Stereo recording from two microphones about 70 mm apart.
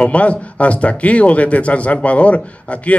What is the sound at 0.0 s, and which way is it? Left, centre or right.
A man's voice, centre.